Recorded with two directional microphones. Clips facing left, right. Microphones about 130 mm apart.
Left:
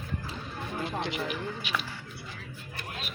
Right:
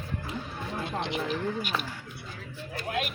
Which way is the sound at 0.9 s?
20° right (ahead or behind).